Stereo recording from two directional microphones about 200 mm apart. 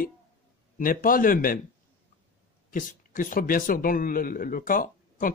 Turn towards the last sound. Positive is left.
turn(degrees=45)  # may be behind; listen again after turning